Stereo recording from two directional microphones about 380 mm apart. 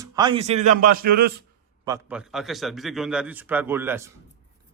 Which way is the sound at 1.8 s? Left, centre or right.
Centre.